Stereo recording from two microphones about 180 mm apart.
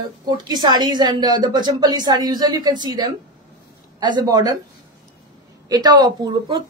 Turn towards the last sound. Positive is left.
turn(degrees=-20)  # may be behind; listen again after turning